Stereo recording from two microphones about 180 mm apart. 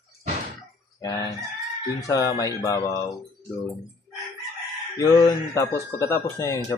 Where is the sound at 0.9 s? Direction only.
20° left (ahead or behind).